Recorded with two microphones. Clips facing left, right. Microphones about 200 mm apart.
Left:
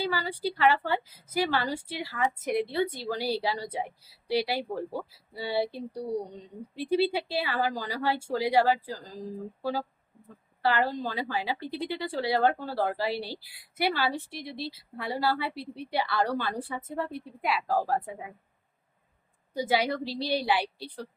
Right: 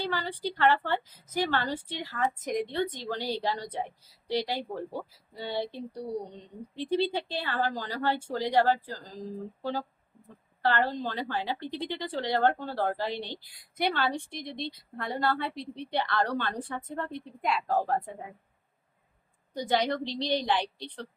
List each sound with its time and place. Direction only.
0.0 s a woman's voice: 10° left (ahead or behind)
10.6 s a woman's voice: 10° left (ahead or behind)
19.5 s a woman's voice: 5° left (ahead or behind)